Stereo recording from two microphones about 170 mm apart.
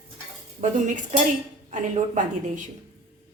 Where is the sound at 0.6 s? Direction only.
45° right (ahead or behind).